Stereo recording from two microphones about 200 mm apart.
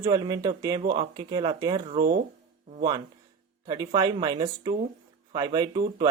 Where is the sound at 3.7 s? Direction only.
20° right (ahead or behind).